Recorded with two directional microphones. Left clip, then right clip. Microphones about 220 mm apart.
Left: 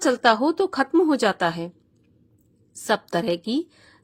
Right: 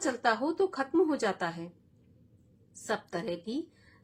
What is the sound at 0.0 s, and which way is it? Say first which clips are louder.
A woman's voice: left 10 dB; 40° left (ahead or behind).